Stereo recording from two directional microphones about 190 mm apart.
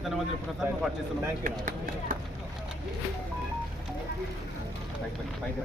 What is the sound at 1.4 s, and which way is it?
Speech, 45° right (ahead or behind).